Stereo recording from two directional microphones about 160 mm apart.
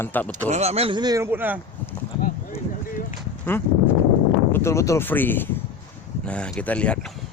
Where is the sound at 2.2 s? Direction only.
60° left (ahead or behind).